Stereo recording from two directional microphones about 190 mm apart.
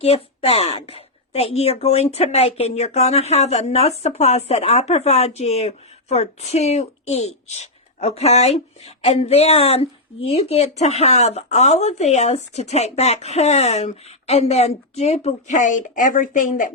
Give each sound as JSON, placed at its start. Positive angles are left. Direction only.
{"t": 0.0, "sound": "speech", "side_deg": 30}